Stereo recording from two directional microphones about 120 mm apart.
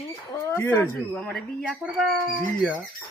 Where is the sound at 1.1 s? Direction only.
5° left (ahead or behind).